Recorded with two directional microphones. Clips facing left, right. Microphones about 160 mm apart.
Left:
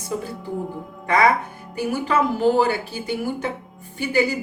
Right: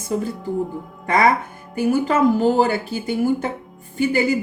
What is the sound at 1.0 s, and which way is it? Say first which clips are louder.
Speech: right 1 dB; 45° right (ahead or behind).